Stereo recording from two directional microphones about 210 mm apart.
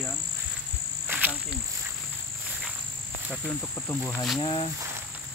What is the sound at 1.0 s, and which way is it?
Cricket, 10° right (ahead or behind).